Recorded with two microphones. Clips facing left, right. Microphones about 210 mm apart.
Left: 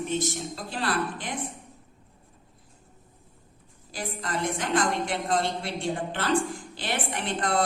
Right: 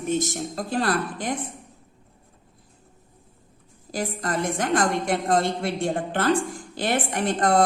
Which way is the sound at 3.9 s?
45° right (ahead or behind).